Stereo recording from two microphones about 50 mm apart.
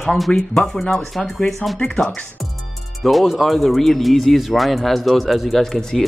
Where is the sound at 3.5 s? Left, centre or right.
Centre.